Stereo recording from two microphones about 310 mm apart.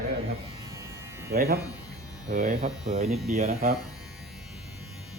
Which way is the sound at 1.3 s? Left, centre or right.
Right.